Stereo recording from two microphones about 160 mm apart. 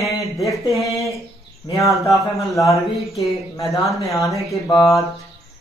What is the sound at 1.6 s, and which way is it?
Mantra, 20° left (ahead or behind).